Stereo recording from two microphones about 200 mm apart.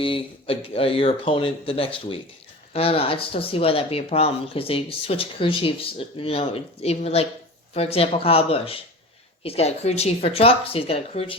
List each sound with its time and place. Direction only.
0.0 s speech: 25° left (ahead or behind)